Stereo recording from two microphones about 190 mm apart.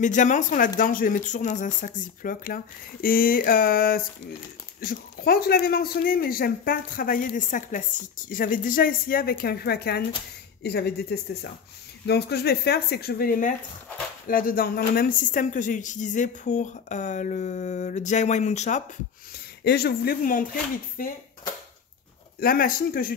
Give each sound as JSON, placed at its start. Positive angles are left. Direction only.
{"t": 0.0, "sound": "speech", "side_deg": 40}
{"t": 19.6, "sound": "speech", "side_deg": 55}
{"t": 22.4, "sound": "speech", "side_deg": 50}